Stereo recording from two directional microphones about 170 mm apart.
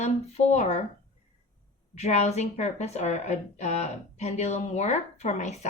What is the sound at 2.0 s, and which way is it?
Speech, 40° left (ahead or behind).